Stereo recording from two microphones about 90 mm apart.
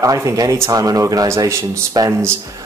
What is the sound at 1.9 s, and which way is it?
Speech, 45° right (ahead or behind).